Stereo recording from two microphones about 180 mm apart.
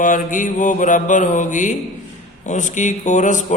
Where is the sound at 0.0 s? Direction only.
45° left (ahead or behind).